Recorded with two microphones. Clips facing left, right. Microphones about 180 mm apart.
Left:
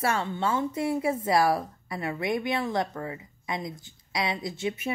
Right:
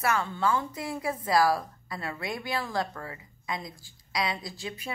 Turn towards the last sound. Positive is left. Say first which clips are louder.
# left 7 dB
turn(degrees=20)  # may be behind; listen again after turning